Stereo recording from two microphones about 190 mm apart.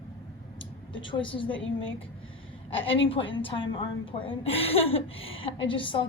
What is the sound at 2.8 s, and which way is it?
A woman's voice, 30° left (ahead or behind).